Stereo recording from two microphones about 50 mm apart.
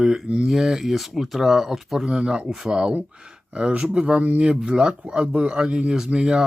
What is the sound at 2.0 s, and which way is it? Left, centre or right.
A man's voice, centre.